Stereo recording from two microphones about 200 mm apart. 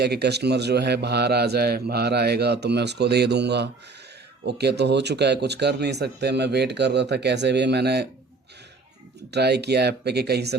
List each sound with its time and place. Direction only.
0.0 s a man's voice: 55° right (ahead or behind)
9.3 s a man's voice: 55° right (ahead or behind)